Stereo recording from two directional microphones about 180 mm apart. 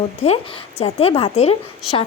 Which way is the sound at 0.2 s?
40° left (ahead or behind).